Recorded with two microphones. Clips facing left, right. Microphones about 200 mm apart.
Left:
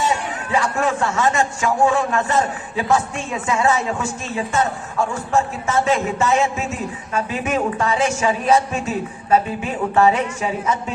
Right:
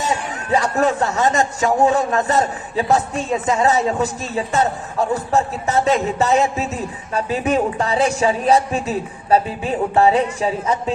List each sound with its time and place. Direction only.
0.5 s a man's voice: 40° right (ahead or behind)